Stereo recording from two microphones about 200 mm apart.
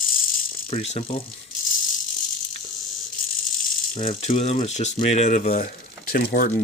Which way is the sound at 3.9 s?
40° left (ahead or behind).